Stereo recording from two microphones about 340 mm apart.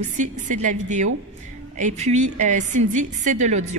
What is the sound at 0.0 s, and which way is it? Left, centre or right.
A woman's voice, right.